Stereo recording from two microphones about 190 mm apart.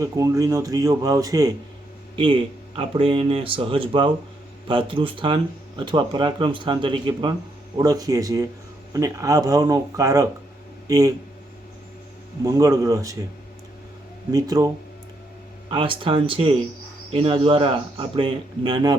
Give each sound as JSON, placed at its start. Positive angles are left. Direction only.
{"t": 0.0, "sound": "speech", "side_deg": -15}
{"t": 12.5, "sound": "speech", "side_deg": -20}
{"t": 14.3, "sound": "speech", "side_deg": -20}
{"t": 15.7, "sound": "speech", "side_deg": -25}